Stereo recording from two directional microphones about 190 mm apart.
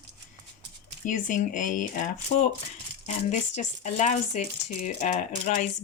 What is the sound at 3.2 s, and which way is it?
Speech, 40° left (ahead or behind).